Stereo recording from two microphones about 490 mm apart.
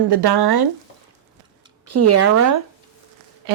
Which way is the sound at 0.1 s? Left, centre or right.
Right.